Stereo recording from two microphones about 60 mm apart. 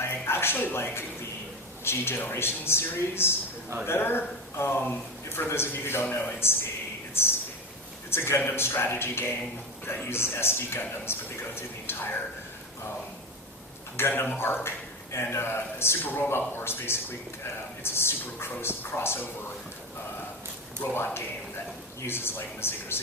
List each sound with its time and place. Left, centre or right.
0.0 s a sound: left
1.8 s a man's voice: left
7.1 s a sound: left
8.1 s a man's voice: left
14.2 s a man's voice: left
20.9 s speech: left